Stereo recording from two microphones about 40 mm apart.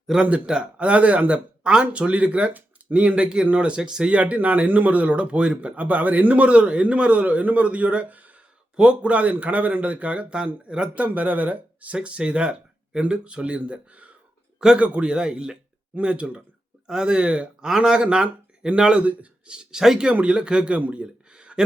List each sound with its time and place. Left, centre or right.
0.4 s a man's voice: right
1.6 s a man's voice: right
3.8 s speech: centre
4.1 s a man's voice: right
5.7 s a man's voice: right
8.7 s a man's voice: right
9.0 s a man's voice: right
11.0 s a man's voice: right
11.9 s a man's voice: right
15.1 s speech: right
19.8 s speech: centre
20.2 s speech: right
20.7 s a man's voice: right
21.0 s a sound: right